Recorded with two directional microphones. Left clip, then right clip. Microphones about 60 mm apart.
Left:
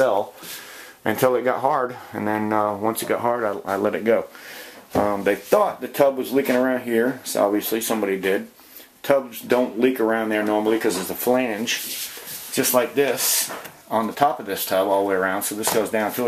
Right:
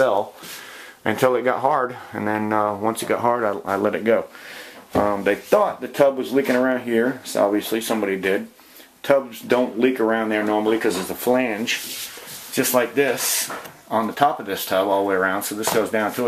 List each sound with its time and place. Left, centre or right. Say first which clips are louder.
0.0 s speech: right 1 dB; centre
1.9 s speech: even; centre
3.3 s speech: right 3 dB; centre
3.8 s speech: even; centre
7.5 s speech: right 1 dB; left
7.9 s speech: even; centre